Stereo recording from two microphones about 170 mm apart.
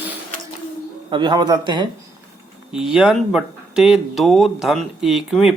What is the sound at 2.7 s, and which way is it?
Speech, 5° right (ahead or behind).